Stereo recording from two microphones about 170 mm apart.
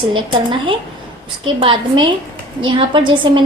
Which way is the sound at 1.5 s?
30° right (ahead or behind).